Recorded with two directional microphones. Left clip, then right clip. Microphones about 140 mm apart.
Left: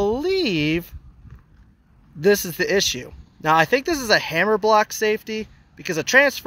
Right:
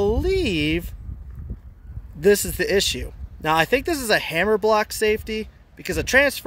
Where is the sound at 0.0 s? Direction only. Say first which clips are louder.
Left 1 dB; 30° right (ahead or behind).